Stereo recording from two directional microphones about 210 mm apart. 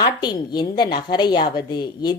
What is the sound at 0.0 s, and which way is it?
Speech, 20° left (ahead or behind).